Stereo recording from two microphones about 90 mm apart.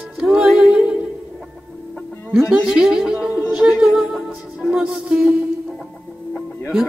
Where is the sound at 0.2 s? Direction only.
5° right (ahead or behind).